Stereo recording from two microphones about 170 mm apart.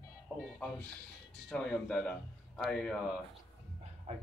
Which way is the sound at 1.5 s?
5° left (ahead or behind).